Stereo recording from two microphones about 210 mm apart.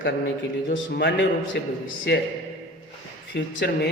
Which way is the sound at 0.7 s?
55° left (ahead or behind).